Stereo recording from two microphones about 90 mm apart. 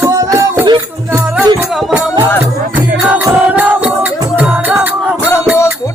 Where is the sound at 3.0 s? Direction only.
15° right (ahead or behind).